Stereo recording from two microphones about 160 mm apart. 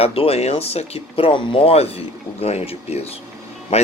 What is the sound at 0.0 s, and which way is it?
Speech, 35° left (ahead or behind).